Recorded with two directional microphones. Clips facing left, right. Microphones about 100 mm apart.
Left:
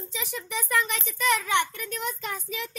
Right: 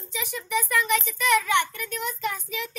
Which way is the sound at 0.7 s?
30° left (ahead or behind).